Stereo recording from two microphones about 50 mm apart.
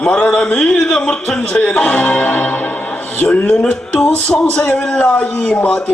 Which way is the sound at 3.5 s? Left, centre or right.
Centre.